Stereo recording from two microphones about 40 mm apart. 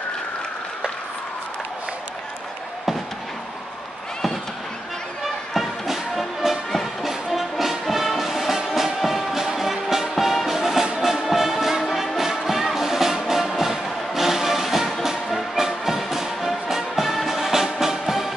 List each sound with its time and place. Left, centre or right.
5.2 s music: centre
6.7 s music: centre